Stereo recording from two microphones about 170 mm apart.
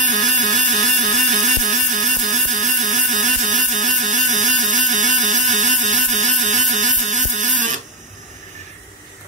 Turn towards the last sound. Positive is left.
turn(degrees=-45)  # may be behind; listen again after turning